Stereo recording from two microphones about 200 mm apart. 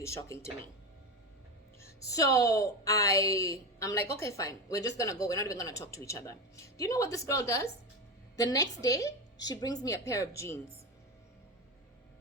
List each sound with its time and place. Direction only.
0.0 s a woman's voice: 15° left (ahead or behind)
1.8 s a woman's voice: 15° left (ahead or behind)